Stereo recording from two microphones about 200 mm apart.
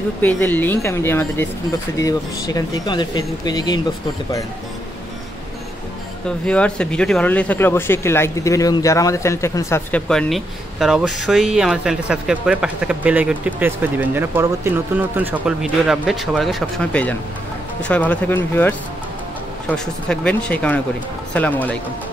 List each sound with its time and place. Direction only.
0.2 s speech: 10° left (ahead or behind)
6.2 s speech: 5° left (ahead or behind)